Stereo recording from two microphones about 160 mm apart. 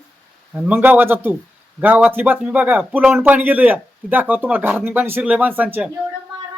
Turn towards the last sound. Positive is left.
turn(degrees=-10)  # may be behind; listen again after turning